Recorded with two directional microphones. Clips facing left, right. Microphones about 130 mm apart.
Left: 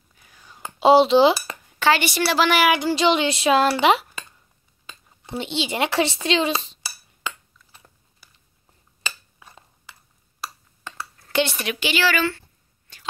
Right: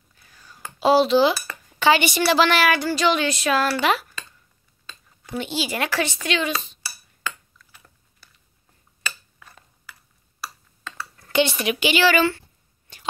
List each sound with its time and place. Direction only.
0.2 s whispering: 15° left (ahead or behind)
1.8 s a woman's voice: centre (ahead or behind); by 4.2 s 25° left (ahead or behind)
5.2 s a woman's voice: 25° left (ahead or behind)
9.0 s a sound: 20° left (ahead or behind)
11.3 s a woman's voice: centre (ahead or behind)
11.7 s speech: 15° right (ahead or behind)